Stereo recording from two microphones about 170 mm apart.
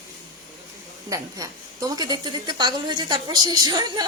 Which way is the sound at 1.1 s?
20° right (ahead or behind).